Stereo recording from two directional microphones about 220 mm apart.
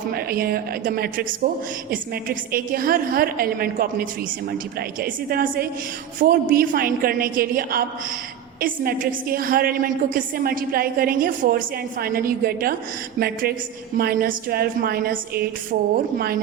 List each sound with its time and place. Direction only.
0.1 s a woman's voice: 45° right (ahead or behind)